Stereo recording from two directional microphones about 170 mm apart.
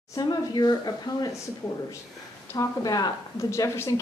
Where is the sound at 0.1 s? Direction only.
25° left (ahead or behind).